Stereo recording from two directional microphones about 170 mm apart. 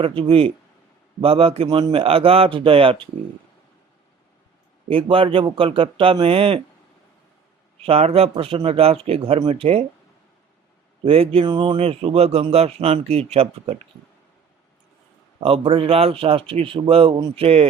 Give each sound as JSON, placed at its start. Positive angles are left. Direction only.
{"t": 0.0, "sound": "a man's voice", "side_deg": -35}
{"t": 4.9, "sound": "a man's voice", "side_deg": -30}
{"t": 7.8, "sound": "a man's voice", "side_deg": -35}
{"t": 11.0, "sound": "a man's voice", "side_deg": -35}
{"t": 15.4, "sound": "a man's voice", "side_deg": -30}